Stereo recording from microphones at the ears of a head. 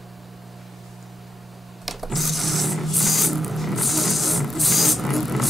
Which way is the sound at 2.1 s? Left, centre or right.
Centre.